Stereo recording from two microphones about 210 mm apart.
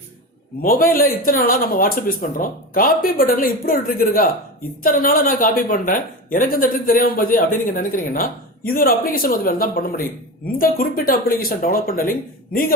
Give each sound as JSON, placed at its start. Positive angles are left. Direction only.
{"t": 0.6, "sound": "a woman's voice", "side_deg": 40}